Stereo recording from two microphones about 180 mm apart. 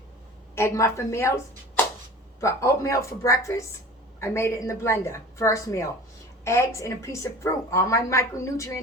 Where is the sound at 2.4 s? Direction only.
15° left (ahead or behind).